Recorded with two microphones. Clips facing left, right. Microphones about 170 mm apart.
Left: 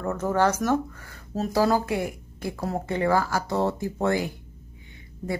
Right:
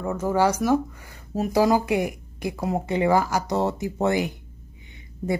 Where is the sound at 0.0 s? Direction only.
10° right (ahead or behind).